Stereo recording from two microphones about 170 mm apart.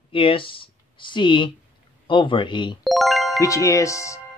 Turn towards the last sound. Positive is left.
turn(degrees=20)  # may be behind; listen again after turning